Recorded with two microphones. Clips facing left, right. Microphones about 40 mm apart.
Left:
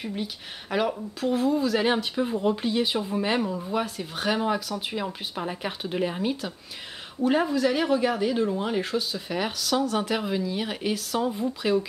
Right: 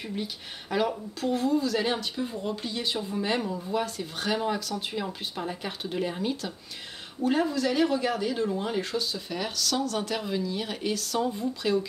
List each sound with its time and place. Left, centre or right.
0.0 s speech: centre